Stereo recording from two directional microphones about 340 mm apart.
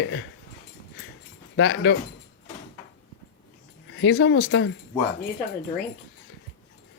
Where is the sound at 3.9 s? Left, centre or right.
Left.